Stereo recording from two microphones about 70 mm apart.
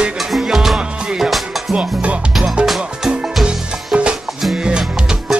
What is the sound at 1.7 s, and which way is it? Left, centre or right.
Music, centre.